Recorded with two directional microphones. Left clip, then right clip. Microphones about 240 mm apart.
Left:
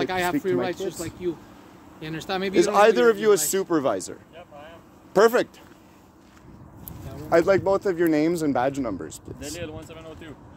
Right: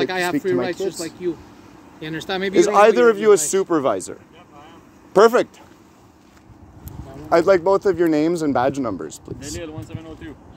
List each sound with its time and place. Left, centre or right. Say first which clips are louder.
0.0 s speech: right 3 dB; right
7.2 s speech: right 4 dB; right
9.6 s speech: right 3 dB; centre